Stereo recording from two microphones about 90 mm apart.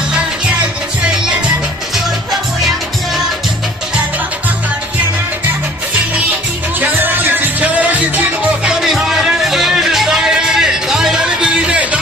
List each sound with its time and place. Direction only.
0.6 s music: 10° right (ahead or behind)
6.7 s music: 20° right (ahead or behind)
8.6 s music: 5° right (ahead or behind)